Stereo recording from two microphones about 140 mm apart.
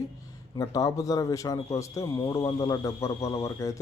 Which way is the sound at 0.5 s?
25° left (ahead or behind).